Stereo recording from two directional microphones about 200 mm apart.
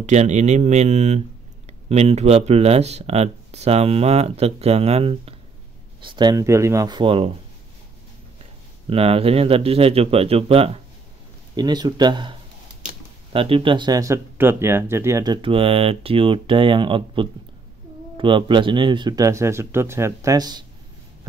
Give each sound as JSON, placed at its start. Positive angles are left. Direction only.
{"t": 0.0, "sound": "speech", "side_deg": -35}
{"t": 8.8, "sound": "speech", "side_deg": -30}